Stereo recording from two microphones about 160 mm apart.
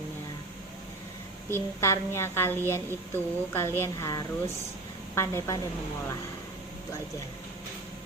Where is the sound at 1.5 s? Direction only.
15° left (ahead or behind).